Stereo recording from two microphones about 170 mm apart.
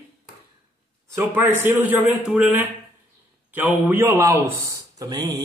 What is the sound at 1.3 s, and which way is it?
A man's voice, 10° right (ahead or behind).